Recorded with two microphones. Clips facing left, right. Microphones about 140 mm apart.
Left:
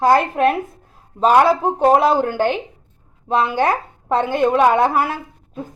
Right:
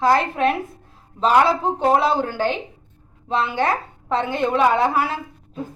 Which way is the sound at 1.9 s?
45° left (ahead or behind).